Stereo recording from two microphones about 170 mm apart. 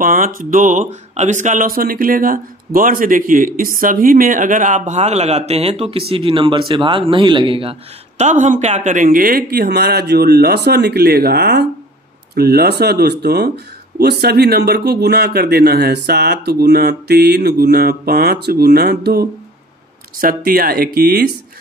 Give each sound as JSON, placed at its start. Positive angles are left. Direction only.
{"t": 0.0, "sound": "speech", "side_deg": -55}
{"t": 8.2, "sound": "speech", "side_deg": -45}